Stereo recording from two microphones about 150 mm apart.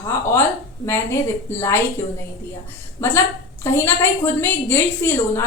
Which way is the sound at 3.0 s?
15° left (ahead or behind).